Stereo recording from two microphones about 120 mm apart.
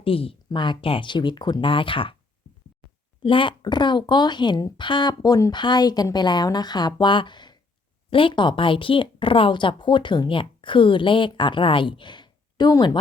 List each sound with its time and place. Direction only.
0.0 s speech: 50° left (ahead or behind)
3.2 s a woman's voice: 45° left (ahead or behind)